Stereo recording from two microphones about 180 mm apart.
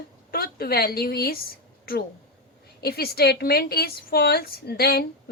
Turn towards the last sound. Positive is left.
turn(degrees=60)  # may be behind; listen again after turning